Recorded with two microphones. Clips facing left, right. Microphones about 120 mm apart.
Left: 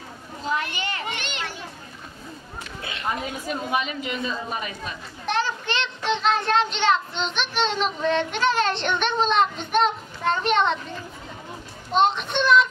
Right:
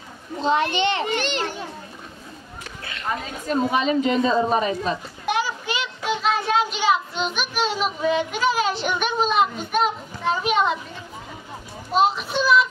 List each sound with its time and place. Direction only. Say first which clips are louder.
0.5 s a child's voice: right 7 dB; 25° right (ahead or behind)
1.0 s a woman's voice: right 7 dB; 35° right (ahead or behind)
2.8 s a woman's voice: even; 15° left (ahead or behind)
3.7 s a woman's voice: right 7 dB; 30° right (ahead or behind)
5.2 s a child's voice: even; 10° right (ahead or behind)
11.9 s a child's voice: right 1 dB; 5° right (ahead or behind)